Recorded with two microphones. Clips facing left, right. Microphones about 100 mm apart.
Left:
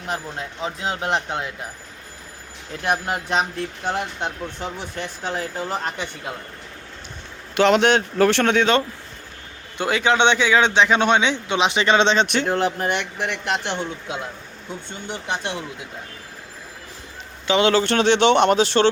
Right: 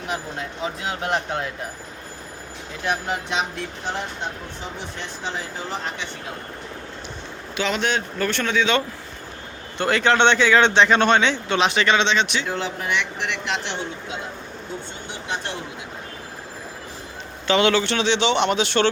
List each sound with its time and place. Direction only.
0.6 s speech: 25° left (ahead or behind)
2.8 s speech: 50° left (ahead or behind)
3.8 s speech: 60° left (ahead or behind)
7.5 s speech: 75° left (ahead or behind)
9.7 s speech: 10° left (ahead or behind)
11.9 s speech: 40° left (ahead or behind)
17.6 s a man's voice: 35° left (ahead or behind)
17.8 s speech: 50° left (ahead or behind)